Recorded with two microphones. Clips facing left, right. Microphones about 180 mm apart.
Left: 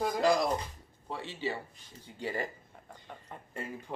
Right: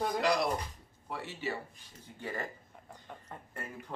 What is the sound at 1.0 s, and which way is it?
Speech, 25° left (ahead or behind).